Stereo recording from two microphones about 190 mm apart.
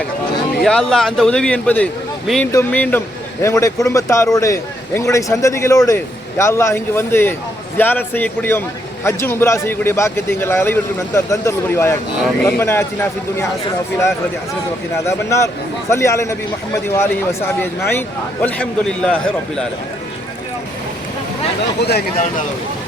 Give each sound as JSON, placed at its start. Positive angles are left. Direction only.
{"t": 0.6, "sound": "a man's voice", "side_deg": 5}
{"t": 15.0, "sound": "a man's voice", "side_deg": 15}
{"t": 21.8, "sound": "speech", "side_deg": 60}